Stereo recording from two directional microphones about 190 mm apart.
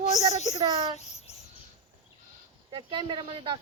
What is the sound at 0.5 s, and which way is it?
Speech, 20° right (ahead or behind).